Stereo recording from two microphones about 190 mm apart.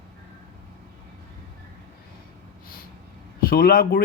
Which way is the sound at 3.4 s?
50° left (ahead or behind).